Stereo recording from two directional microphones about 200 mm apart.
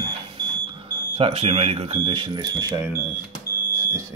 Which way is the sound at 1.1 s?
30° right (ahead or behind).